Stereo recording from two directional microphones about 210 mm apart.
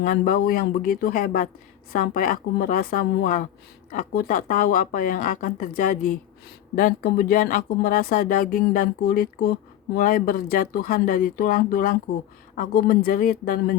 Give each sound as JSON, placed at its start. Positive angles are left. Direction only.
{"t": 0.0, "sound": "speech", "side_deg": 40}